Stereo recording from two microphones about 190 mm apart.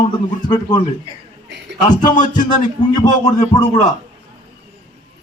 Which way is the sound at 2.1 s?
40° left (ahead or behind).